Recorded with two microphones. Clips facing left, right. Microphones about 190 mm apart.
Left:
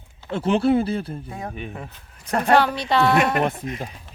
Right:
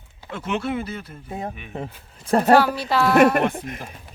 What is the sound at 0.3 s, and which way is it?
Speech, 30° left (ahead or behind).